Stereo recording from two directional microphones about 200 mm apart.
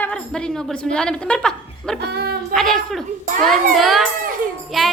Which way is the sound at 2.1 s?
55° right (ahead or behind).